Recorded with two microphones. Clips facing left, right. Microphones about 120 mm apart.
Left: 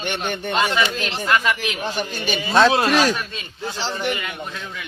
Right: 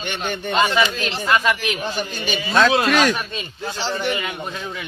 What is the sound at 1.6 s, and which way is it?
Speech, 15° left (ahead or behind).